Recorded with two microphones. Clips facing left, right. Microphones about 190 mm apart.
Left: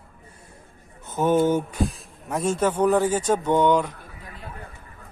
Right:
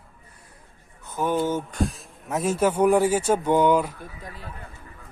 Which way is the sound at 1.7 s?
Centre (ahead or behind).